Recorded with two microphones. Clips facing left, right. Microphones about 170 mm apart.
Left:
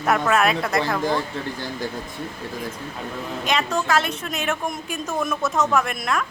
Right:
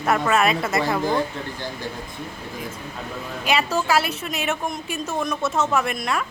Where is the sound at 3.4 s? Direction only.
10° right (ahead or behind).